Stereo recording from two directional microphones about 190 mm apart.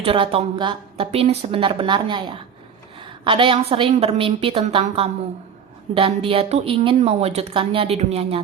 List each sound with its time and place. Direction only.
0.0 s a woman's voice: 30° right (ahead or behind)